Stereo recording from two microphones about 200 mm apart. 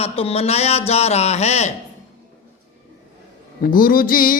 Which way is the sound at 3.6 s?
45° left (ahead or behind).